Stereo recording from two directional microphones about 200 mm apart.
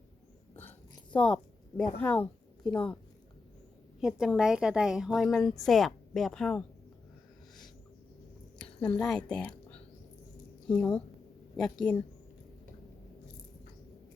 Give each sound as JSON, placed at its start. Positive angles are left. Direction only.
{"t": 1.1, "sound": "a woman's voice", "side_deg": 5}
{"t": 4.0, "sound": "a woman's voice", "side_deg": -5}
{"t": 8.6, "sound": "a woman's voice", "side_deg": 5}